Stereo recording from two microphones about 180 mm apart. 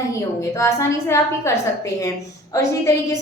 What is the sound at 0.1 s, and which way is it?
A woman's voice, 15° left (ahead or behind).